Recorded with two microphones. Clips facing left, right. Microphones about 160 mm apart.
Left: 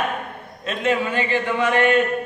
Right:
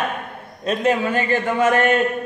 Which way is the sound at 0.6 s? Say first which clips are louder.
Right 3 dB; 40° right (ahead or behind).